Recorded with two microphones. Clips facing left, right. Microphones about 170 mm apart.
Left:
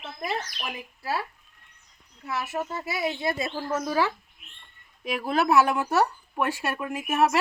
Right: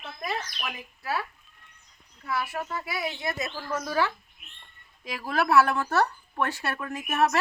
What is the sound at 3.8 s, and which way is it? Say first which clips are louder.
Speech: left 1 dB; 10° left (ahead or behind).